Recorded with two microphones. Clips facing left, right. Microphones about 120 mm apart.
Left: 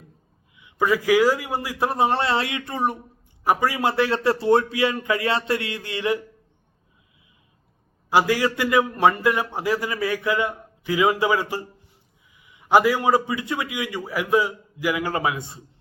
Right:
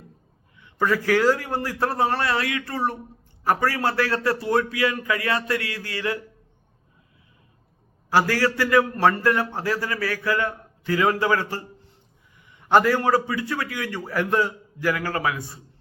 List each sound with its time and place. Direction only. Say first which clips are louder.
0.5 s a man's voice: left 1 dB; 10° left (ahead or behind)
8.1 s a man's voice: left 1 dB; 15° left (ahead or behind)